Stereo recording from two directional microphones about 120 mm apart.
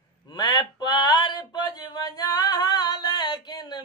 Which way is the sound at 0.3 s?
35° left (ahead or behind).